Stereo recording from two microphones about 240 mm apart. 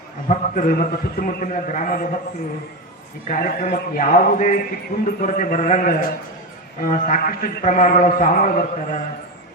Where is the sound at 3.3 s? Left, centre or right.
Left.